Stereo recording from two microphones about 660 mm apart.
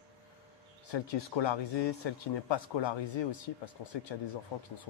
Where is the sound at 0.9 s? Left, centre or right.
Left.